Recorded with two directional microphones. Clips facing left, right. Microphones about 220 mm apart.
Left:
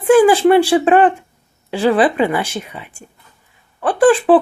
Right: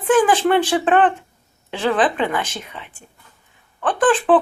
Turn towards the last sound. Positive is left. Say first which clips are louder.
# left 5 dB
turn(degrees=10)  # may be behind; listen again after turning